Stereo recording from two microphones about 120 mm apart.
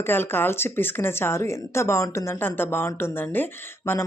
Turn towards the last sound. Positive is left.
turn(degrees=20)  # may be behind; listen again after turning